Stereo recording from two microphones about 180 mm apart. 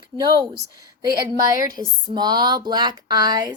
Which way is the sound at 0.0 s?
25° right (ahead or behind).